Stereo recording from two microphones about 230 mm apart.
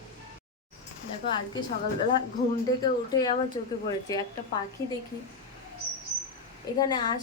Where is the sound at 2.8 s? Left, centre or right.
Centre.